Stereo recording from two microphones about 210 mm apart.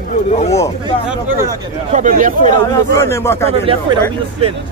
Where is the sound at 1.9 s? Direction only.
35° right (ahead or behind).